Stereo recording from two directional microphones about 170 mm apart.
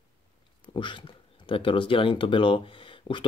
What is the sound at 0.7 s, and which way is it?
Speech, 30° left (ahead or behind).